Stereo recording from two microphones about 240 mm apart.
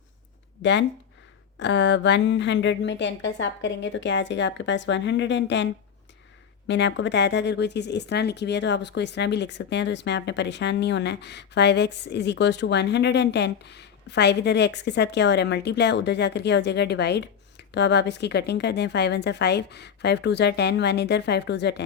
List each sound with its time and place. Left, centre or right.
0.6 s speech: left
6.7 s speech: left